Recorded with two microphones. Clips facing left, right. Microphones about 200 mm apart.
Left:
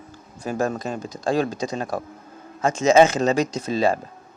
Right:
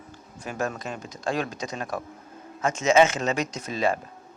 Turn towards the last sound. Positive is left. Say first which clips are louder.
# left 5 dB
turn(degrees=30)  # may be behind; listen again after turning